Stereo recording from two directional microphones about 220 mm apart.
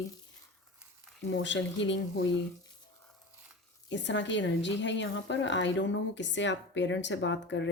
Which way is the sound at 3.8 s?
55° left (ahead or behind).